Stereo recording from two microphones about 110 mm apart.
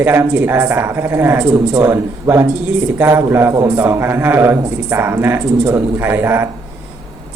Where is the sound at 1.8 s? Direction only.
25° right (ahead or behind).